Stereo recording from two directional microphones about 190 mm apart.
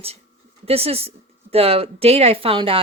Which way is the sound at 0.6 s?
30° right (ahead or behind).